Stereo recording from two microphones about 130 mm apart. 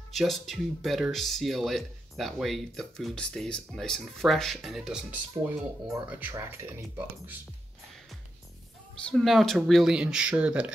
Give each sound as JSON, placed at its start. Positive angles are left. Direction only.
{"t": 0.1, "sound": "speech", "side_deg": 0}
{"t": 9.0, "sound": "speech", "side_deg": 0}